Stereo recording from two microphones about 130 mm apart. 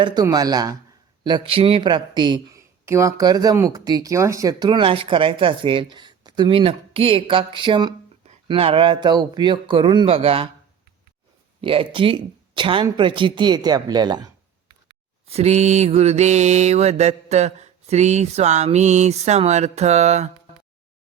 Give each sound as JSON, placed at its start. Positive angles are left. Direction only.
{"t": 0.0, "sound": "speech", "side_deg": -35}
{"t": 1.2, "sound": "speech", "side_deg": -40}
{"t": 2.8, "sound": "speech", "side_deg": -25}
{"t": 11.6, "sound": "speech", "side_deg": -45}
{"t": 15.3, "sound": "mantra", "side_deg": -55}